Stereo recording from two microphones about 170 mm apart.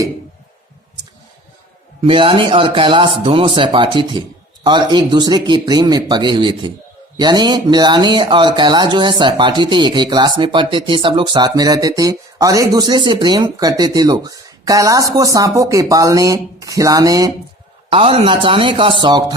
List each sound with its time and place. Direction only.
2.0 s speech: 30° right (ahead or behind)
17.9 s speech: 35° right (ahead or behind)